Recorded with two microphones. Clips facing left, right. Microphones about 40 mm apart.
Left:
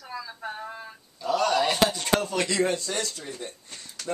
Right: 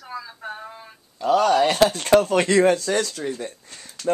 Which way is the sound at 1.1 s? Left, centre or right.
Right.